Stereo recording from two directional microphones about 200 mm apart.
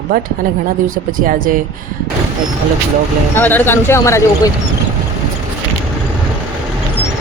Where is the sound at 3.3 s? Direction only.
10° left (ahead or behind).